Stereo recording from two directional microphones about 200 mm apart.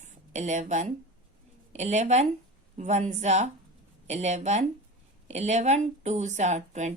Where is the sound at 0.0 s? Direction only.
35° right (ahead or behind).